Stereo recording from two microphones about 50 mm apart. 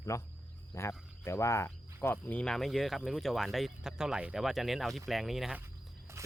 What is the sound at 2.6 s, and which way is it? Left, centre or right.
Speech, centre.